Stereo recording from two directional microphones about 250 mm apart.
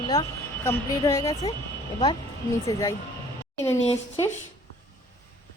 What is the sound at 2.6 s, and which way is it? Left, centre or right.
Speech, centre.